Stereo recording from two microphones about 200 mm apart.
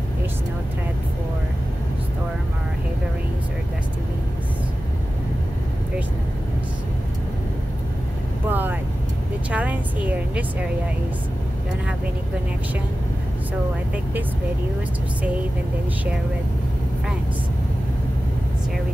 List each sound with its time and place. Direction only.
8.5 s vehicle: 10° right (ahead or behind)
9.5 s a woman's voice: 5° right (ahead or behind)